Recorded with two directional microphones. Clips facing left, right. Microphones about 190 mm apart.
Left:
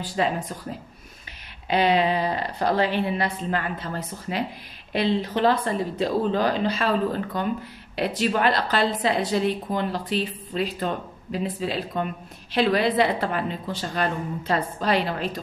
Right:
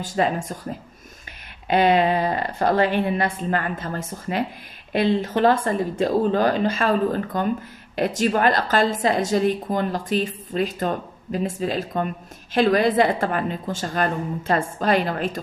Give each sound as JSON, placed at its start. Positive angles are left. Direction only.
{"t": 0.0, "sound": "a woman's voice", "side_deg": -45}
{"t": 1.7, "sound": "a woman's voice", "side_deg": -50}